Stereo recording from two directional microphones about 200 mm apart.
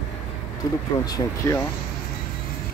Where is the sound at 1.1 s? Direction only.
15° left (ahead or behind).